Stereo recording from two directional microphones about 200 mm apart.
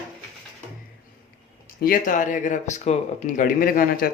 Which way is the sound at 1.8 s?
45° left (ahead or behind).